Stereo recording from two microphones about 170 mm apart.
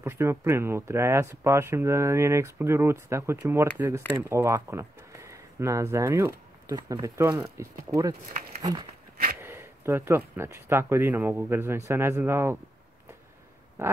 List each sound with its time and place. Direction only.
0.0 s speech: 15° right (ahead or behind)
9.4 s speech: 15° right (ahead or behind)
13.8 s speech: 15° right (ahead or behind)